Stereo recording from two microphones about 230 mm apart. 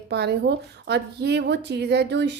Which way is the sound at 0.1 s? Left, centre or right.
Right.